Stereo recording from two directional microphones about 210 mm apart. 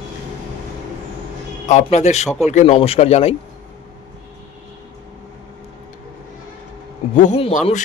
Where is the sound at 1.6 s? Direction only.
35° left (ahead or behind).